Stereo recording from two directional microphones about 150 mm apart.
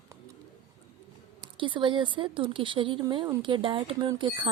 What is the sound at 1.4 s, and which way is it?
Speech, 35° right (ahead or behind).